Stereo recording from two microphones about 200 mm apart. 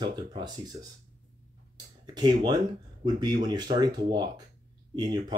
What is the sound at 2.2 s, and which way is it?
Speech, 20° right (ahead or behind).